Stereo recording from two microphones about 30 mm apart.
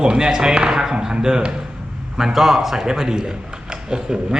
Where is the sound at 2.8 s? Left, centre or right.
Right.